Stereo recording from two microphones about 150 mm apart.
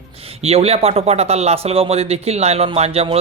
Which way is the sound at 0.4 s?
40° right (ahead or behind).